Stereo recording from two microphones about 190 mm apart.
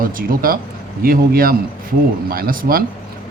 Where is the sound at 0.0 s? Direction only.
50° right (ahead or behind).